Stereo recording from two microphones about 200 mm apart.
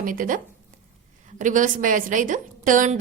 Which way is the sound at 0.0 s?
45° right (ahead or behind).